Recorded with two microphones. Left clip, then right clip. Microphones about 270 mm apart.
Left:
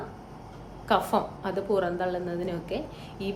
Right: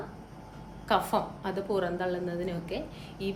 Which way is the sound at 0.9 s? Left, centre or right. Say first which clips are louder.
Left 2 dB; centre.